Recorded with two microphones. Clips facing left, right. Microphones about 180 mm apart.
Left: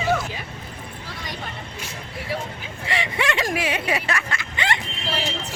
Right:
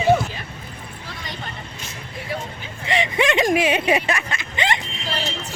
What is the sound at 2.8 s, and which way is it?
Speech, 20° right (ahead or behind).